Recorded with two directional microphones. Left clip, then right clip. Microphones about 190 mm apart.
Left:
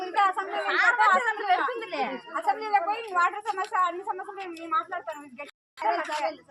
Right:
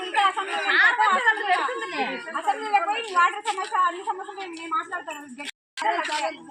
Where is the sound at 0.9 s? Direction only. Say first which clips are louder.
Even; 15° left (ahead or behind).